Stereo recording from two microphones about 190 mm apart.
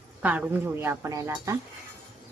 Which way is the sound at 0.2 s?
10° right (ahead or behind).